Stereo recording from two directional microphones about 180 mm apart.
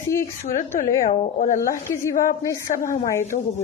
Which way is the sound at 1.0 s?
45° left (ahead or behind).